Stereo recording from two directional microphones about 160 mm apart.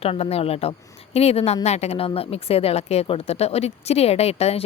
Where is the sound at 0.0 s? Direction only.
40° left (ahead or behind).